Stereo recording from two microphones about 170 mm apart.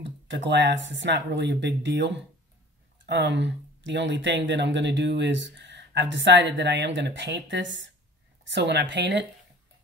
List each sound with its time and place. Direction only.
0.0 s speech: 90° right